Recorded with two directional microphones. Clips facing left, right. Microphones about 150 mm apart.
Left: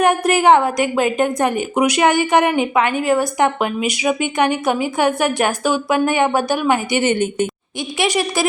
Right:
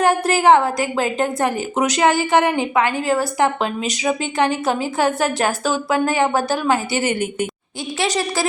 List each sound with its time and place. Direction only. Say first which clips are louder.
0.0 s a woman's voice: left 1 dB; 15° left (ahead or behind)
7.9 s a woman's voice: left 2 dB; 15° left (ahead or behind)